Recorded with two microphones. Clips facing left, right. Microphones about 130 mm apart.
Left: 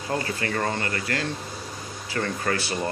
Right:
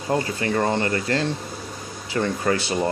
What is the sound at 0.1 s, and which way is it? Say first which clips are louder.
Speech: right 5 dB; 25° right (ahead or behind).